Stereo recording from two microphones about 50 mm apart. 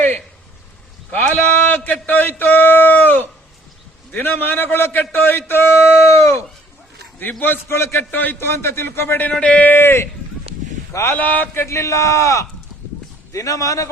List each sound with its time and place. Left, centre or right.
1.1 s a man's voice: left
7.2 s a man's voice: left
7.7 s a man's voice: left
8.1 s a man's voice: left
8.4 s a man's voice: left
9.4 s speech: left
9.7 s a man's voice: left
11.1 s a man's voice: left
11.5 s a man's voice: left